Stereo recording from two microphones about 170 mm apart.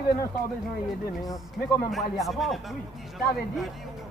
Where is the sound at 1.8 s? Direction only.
Centre (ahead or behind).